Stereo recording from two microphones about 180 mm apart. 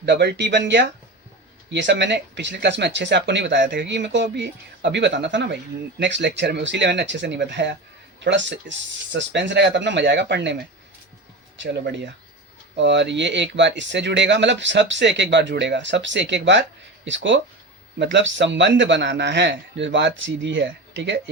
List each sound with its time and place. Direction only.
0.0 s speech: 70° right (ahead or behind)
11.5 s speech: 80° right
17.1 s speech: 90° right